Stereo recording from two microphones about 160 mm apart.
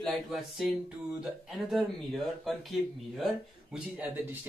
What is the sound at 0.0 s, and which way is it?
Speech, centre (ahead or behind).